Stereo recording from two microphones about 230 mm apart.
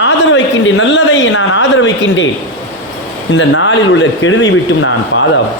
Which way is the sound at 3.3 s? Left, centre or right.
Left.